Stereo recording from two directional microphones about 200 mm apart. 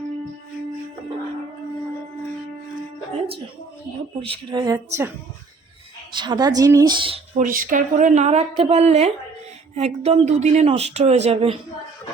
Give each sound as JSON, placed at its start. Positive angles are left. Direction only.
{"t": 4.2, "sound": "speech", "side_deg": -25}
{"t": 7.3, "sound": "speech", "side_deg": -40}